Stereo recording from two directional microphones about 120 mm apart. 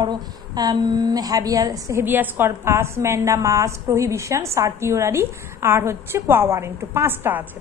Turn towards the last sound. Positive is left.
turn(degrees=-15)  # may be behind; listen again after turning